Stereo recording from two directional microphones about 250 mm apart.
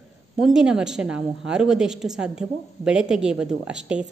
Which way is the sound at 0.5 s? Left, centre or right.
Centre.